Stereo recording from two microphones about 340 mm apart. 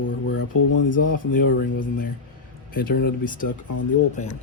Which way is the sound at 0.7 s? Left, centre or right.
Left.